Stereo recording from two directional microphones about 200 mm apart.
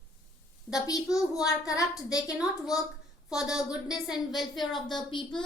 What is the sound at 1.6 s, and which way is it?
Speech, 15° left (ahead or behind).